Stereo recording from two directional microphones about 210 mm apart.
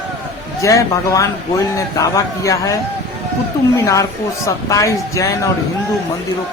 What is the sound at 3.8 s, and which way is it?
A woman's voice, 15° left (ahead or behind).